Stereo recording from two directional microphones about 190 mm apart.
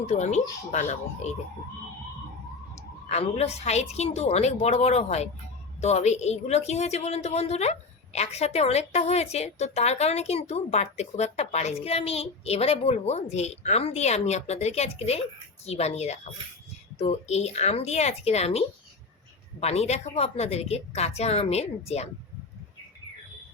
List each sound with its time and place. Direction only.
0.0 s speech: 40° left (ahead or behind)
3.1 s speech: 35° left (ahead or behind)